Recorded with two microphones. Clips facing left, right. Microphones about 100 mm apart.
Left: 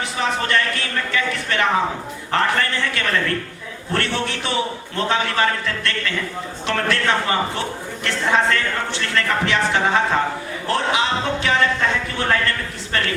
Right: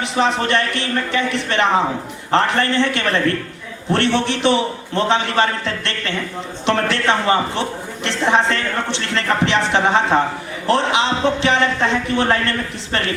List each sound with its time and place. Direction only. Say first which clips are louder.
0.3 s speech: right 2 dB; 25° right (ahead or behind)